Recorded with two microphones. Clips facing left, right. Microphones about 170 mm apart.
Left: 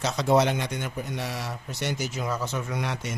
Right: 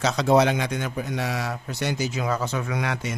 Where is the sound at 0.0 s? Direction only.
90° right.